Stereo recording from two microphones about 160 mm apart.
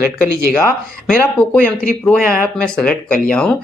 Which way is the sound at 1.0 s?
5° left (ahead or behind).